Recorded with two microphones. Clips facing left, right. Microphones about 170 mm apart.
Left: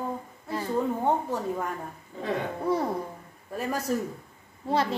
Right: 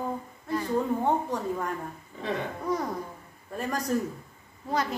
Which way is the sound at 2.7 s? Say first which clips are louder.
Left 3 dB; 30° left (ahead or behind).